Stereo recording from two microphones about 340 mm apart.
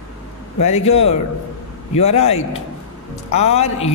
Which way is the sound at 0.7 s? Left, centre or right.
Centre.